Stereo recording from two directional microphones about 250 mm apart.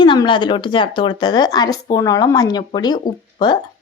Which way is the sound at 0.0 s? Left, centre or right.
Centre.